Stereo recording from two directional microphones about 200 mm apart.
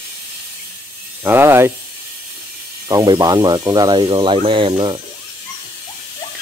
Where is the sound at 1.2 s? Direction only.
10° right (ahead or behind).